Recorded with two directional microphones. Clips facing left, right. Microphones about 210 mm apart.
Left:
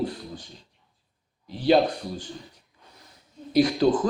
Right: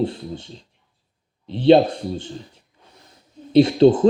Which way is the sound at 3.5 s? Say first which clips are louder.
Right 7 dB; 25° right (ahead or behind).